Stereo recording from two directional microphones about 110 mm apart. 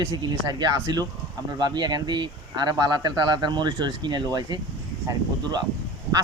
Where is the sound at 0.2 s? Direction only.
40° right (ahead or behind).